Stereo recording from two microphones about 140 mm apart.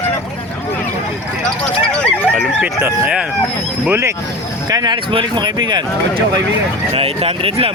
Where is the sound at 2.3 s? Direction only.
10° right (ahead or behind).